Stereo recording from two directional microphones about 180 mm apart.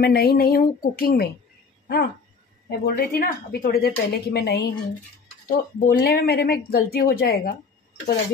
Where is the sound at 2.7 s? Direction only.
60° left (ahead or behind).